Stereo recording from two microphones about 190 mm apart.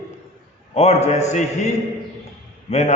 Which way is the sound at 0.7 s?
35° left (ahead or behind).